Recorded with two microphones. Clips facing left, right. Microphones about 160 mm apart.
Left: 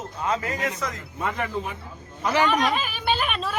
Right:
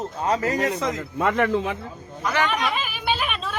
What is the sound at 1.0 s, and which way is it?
Speech, 85° right.